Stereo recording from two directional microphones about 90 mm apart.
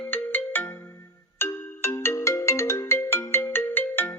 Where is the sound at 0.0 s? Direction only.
20° left (ahead or behind).